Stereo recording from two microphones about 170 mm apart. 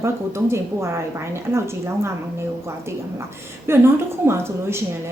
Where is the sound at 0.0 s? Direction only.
15° right (ahead or behind).